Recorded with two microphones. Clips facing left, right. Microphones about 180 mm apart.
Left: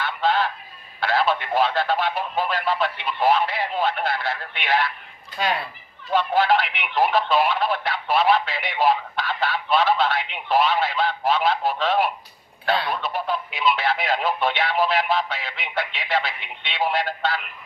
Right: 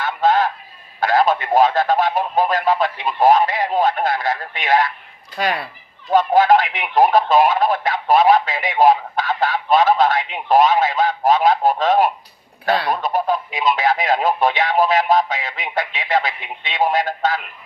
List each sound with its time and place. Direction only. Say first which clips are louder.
0.0 s music: right 5 dB; 45° right (ahead or behind)
0.9 s a sound: right 5 dB; 45° right (ahead or behind)
6.1 s speech: right 6 dB; 45° right (ahead or behind)